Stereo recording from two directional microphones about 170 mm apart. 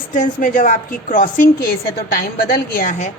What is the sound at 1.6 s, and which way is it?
A woman's voice, 65° left (ahead or behind).